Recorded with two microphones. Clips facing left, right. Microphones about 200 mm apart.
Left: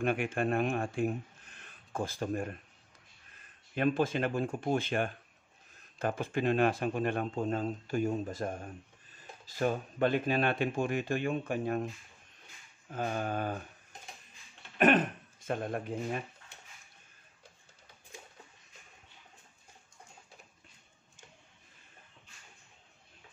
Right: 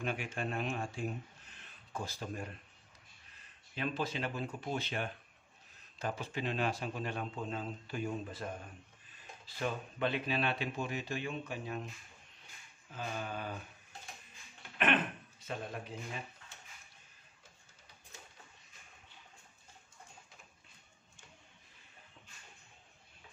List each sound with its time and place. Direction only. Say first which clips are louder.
0.0 s speech: left 8 dB; 55° left (ahead or behind)
3.7 s speech: left 8 dB; 50° left (ahead or behind)
12.9 s speech: left 7 dB; 50° left (ahead or behind)
14.8 s a sound: left 7 dB; 40° left (ahead or behind)